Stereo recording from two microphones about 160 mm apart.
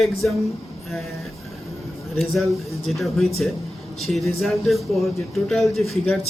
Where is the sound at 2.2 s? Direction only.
Centre (ahead or behind).